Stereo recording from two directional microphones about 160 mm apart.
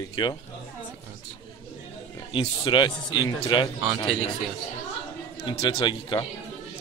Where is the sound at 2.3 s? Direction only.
30° left (ahead or behind).